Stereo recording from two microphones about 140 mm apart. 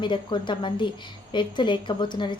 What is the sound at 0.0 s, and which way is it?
A woman's voice, 35° left (ahead or behind).